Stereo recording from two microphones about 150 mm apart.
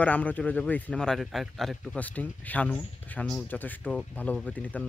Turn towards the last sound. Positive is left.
turn(degrees=5)  # may be behind; listen again after turning